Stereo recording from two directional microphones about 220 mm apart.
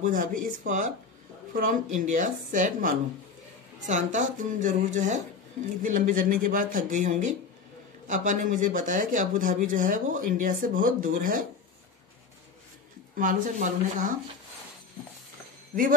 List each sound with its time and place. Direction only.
0.0 s speech: 40° right (ahead or behind)
13.1 s speech: 35° right (ahead or behind)